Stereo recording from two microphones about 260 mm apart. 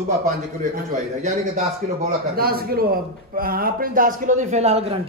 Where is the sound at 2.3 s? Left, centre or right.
Right.